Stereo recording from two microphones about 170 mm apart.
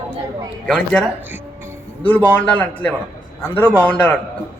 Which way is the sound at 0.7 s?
5° left (ahead or behind).